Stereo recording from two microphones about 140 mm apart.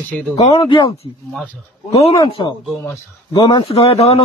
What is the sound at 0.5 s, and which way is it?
Speech, 35° left (ahead or behind).